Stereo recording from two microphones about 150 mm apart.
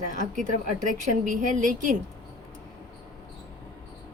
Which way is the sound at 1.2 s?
60° right (ahead or behind).